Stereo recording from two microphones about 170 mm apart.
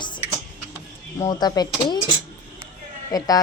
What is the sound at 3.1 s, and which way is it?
Speech, 20° left (ahead or behind).